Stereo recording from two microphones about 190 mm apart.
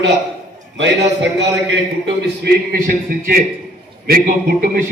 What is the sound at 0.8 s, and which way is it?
Speech, 70° right (ahead or behind).